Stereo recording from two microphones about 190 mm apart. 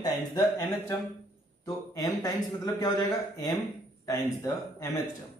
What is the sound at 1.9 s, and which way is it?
A man's voice, 20° left (ahead or behind).